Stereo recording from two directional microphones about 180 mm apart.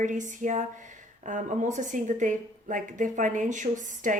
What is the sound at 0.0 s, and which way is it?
Speech, 45° right (ahead or behind).